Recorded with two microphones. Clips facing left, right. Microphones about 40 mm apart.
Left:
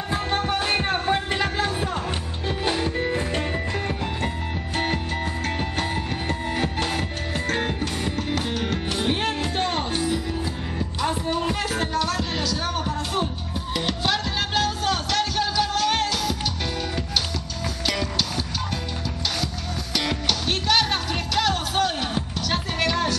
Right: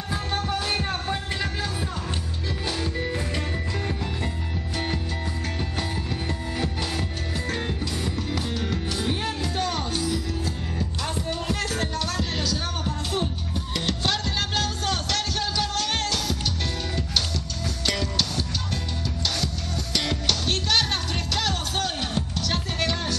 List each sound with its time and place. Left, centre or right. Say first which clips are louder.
0.1 s music: left 3 dB; left; by 16.3 s centre
17.8 s music: left 1 dB; centre
19.4 s music: left 1 dB; centre